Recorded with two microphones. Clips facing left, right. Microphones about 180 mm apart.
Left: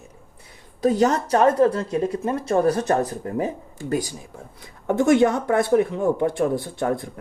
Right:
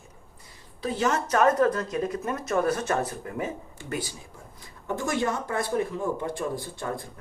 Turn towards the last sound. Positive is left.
turn(degrees=65)  # may be behind; listen again after turning